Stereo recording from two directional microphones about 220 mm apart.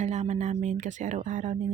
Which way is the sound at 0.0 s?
30° right (ahead or behind).